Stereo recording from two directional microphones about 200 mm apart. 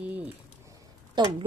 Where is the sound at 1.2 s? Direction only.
20° right (ahead or behind).